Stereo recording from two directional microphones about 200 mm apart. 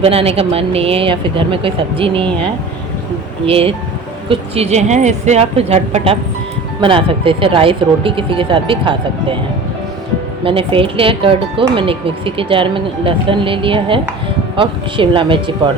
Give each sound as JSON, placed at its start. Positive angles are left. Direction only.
{"t": 0.0, "sound": "a woman's voice", "side_deg": -30}
{"t": 10.4, "sound": "speech", "side_deg": -25}